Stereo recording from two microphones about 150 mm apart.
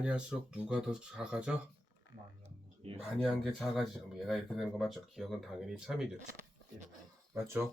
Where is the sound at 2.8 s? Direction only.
40° right (ahead or behind).